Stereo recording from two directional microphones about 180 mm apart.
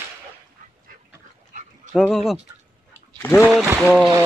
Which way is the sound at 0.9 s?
50° right (ahead or behind).